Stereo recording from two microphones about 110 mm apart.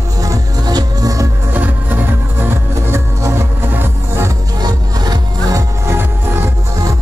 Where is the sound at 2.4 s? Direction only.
20° right (ahead or behind).